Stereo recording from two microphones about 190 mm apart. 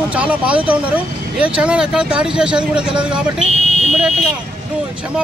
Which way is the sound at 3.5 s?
35° right (ahead or behind).